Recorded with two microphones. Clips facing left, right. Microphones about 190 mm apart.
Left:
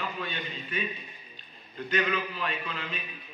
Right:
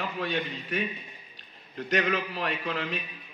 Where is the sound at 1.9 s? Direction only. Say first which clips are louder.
Right 2 dB; 70° right (ahead or behind).